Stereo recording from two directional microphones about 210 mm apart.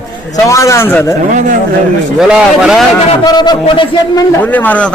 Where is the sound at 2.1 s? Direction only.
5° right (ahead or behind).